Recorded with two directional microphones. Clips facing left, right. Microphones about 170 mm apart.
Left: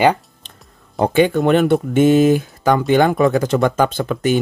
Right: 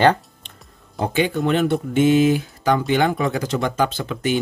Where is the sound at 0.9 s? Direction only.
55° left (ahead or behind).